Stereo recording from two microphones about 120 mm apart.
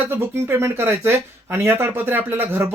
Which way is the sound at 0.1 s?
20° right (ahead or behind).